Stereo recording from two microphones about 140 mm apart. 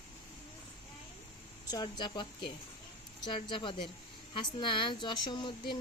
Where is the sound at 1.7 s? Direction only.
30° left (ahead or behind).